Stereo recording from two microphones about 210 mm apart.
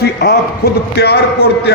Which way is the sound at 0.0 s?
50° left (ahead or behind).